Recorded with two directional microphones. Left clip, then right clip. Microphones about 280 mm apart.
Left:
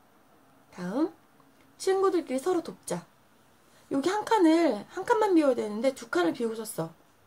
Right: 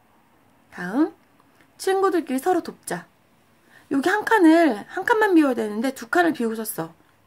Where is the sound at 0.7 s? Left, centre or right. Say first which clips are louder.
Right 7 dB; right.